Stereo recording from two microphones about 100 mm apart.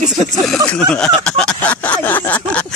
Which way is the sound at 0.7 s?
10° left (ahead or behind).